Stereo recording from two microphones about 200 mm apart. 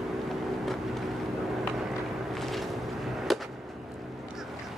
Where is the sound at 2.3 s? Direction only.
Centre (ahead or behind).